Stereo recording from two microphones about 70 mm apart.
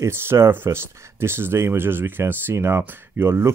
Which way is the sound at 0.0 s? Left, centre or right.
Right.